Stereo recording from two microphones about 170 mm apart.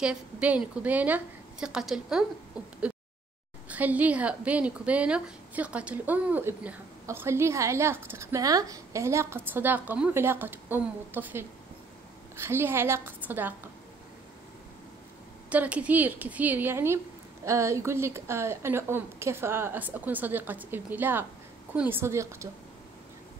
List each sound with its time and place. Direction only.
0.0 s a woman's voice: 5° right (ahead or behind)
2.6 s owl: 20° left (ahead or behind)
3.6 s a woman's voice: 10° right (ahead or behind)
15.5 s a woman's voice: 10° right (ahead or behind)